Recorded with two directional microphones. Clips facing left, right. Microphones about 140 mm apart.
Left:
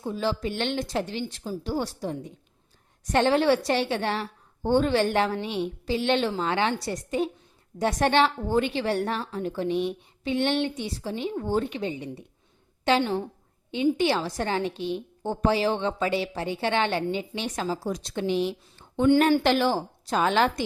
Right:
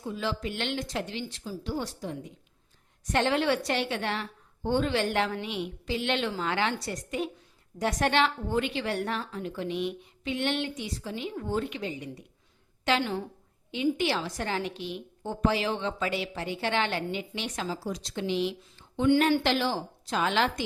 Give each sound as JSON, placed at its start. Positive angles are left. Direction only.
{"t": 0.0, "sound": "a woman's voice", "side_deg": 35}
{"t": 1.3, "sound": "a woman's voice", "side_deg": 50}
{"t": 1.7, "sound": "a woman's voice", "side_deg": 40}
{"t": 17.8, "sound": "a woman's voice", "side_deg": 55}